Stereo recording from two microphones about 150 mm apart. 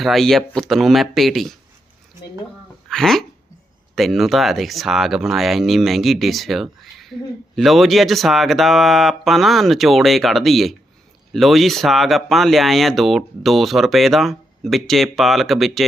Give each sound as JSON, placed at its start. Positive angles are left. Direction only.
{"t": 0.0, "sound": "speech", "side_deg": 0}
{"t": 2.9, "sound": "speech", "side_deg": 5}